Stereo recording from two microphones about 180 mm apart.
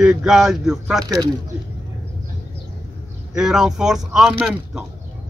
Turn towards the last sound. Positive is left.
turn(degrees=-5)  # may be behind; listen again after turning